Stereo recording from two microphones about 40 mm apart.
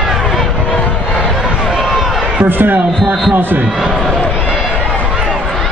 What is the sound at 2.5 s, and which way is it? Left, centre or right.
Speech, right.